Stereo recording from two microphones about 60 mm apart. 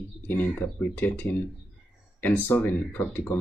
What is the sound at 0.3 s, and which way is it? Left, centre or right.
Speech, left.